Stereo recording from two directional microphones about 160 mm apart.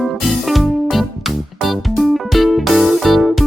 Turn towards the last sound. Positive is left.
turn(degrees=0)  # may be behind; listen again after turning